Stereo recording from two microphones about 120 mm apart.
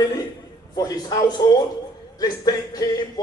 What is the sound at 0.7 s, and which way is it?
A man's voice, 30° left (ahead or behind).